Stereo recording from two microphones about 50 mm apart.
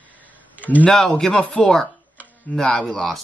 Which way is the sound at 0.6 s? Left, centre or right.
Left.